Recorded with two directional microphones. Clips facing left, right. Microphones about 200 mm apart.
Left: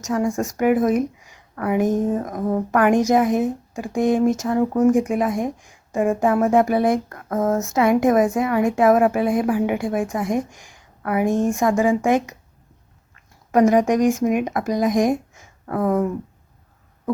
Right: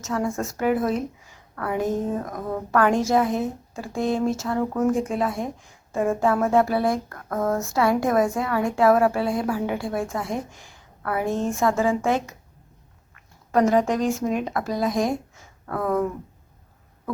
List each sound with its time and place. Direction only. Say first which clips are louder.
0.0 s speech: left 4 dB; 15° left (ahead or behind)
13.5 s speech: left 4 dB; 15° left (ahead or behind)